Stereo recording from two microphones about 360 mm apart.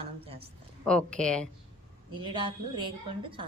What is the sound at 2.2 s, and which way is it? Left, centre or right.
A woman's voice, centre.